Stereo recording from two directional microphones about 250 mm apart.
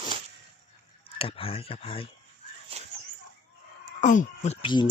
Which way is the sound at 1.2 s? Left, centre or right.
Left.